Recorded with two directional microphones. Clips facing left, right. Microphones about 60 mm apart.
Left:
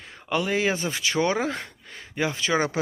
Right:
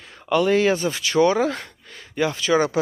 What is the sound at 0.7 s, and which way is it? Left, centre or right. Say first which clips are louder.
Speech: right 6 dB; left.